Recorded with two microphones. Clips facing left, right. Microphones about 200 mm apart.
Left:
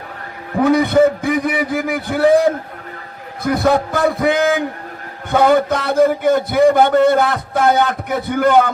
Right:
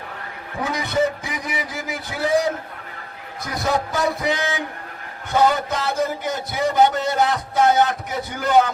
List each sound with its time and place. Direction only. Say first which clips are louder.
0.5 s a man's voice: left 11 dB; 55° left (ahead or behind)